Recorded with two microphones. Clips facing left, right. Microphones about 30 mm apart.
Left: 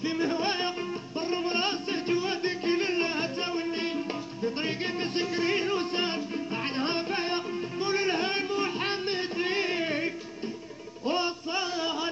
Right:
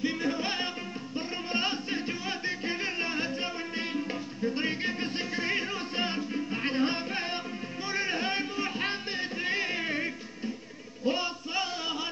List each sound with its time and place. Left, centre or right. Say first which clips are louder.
0.0 s music: left 2 dB; centre
5.4 s music: left 4 dB; centre
9.8 s music: left 2 dB; centre
11.1 s music: left 1 dB; left
11.5 s music: left 1 dB; centre